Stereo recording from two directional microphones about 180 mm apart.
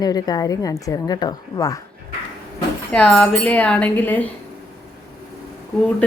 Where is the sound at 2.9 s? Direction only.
5° left (ahead or behind).